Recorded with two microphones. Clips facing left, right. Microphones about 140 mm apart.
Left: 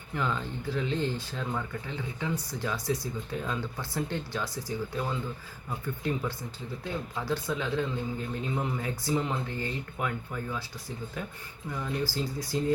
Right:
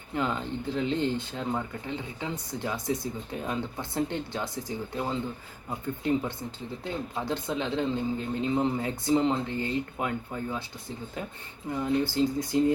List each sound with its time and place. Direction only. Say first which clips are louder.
0.1 s speech: right 2 dB; 20° right (ahead or behind)
11.7 s speech: right 5 dB; 25° right (ahead or behind)